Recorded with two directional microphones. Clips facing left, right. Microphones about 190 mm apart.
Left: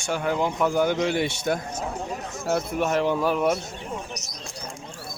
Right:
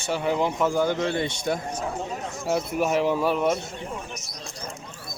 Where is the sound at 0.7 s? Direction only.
15° left (ahead or behind).